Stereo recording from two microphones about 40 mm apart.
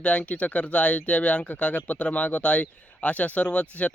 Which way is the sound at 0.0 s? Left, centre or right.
Left.